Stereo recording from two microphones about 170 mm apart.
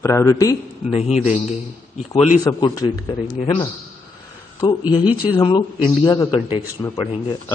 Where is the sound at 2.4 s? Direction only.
20° left (ahead or behind).